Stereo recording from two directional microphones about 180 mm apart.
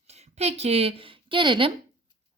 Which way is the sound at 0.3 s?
35° right (ahead or behind).